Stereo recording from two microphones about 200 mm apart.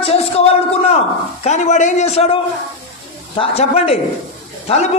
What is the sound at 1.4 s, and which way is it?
A man's voice, 35° left (ahead or behind).